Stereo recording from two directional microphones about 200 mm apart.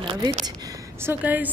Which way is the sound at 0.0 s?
25° right (ahead or behind).